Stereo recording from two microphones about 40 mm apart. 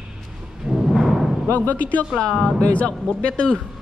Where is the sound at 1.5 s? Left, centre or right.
Left.